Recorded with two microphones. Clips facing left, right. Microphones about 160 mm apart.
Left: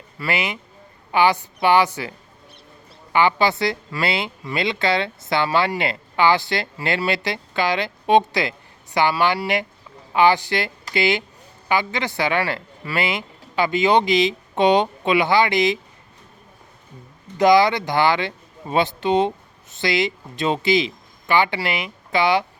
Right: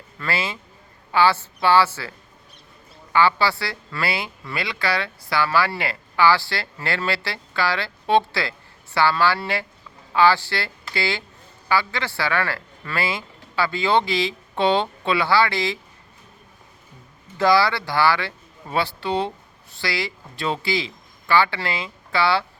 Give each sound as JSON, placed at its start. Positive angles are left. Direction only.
{"t": 0.2, "sound": "a woman's voice", "side_deg": 15}
{"t": 17.3, "sound": "a woman's voice", "side_deg": 20}